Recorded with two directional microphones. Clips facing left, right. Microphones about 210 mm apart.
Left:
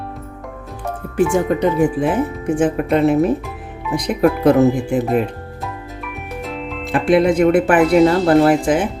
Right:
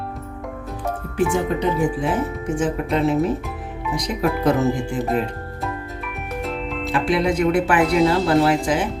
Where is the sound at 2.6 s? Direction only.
55° left (ahead or behind).